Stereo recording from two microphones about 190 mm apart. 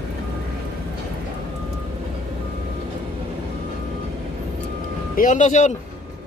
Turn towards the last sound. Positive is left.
turn(degrees=40)  # may be behind; listen again after turning